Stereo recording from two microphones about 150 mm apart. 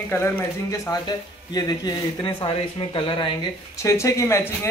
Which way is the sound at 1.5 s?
30° left (ahead or behind).